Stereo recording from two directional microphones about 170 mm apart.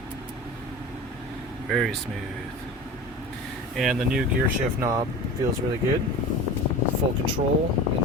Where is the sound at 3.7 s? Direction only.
Centre (ahead or behind).